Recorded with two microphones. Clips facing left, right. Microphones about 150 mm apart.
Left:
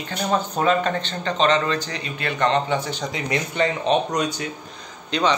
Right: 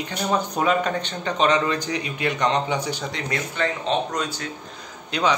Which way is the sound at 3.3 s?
20° left (ahead or behind).